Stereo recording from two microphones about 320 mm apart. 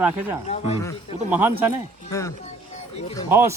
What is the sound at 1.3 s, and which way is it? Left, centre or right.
Speech, centre.